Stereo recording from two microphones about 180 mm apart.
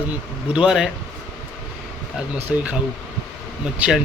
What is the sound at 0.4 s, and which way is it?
Speech, 5° right (ahead or behind).